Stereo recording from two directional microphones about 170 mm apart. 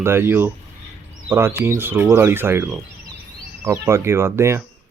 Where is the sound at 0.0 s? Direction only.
15° right (ahead or behind).